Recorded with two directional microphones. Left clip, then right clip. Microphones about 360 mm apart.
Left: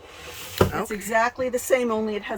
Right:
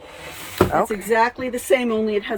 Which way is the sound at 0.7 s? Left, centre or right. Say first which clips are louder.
Right 6 dB; centre.